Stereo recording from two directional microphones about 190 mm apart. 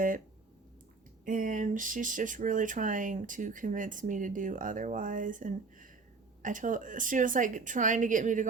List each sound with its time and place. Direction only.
1.2 s speech: 45° right (ahead or behind)